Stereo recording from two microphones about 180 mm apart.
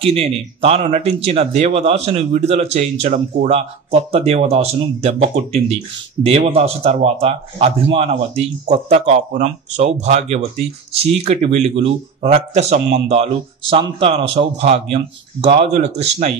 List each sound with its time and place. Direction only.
0.0 s speech: 35° right (ahead or behind)